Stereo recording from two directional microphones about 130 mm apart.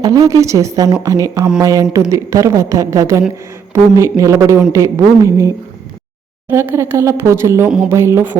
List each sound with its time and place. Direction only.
0.0 s a woman's voice: 25° right (ahead or behind)